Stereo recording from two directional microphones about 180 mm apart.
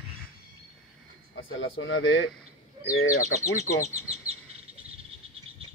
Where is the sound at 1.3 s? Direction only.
90° left.